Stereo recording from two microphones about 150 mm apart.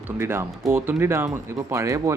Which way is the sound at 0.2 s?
15° right (ahead or behind).